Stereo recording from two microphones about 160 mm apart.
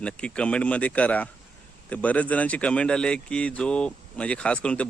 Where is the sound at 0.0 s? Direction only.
5° left (ahead or behind).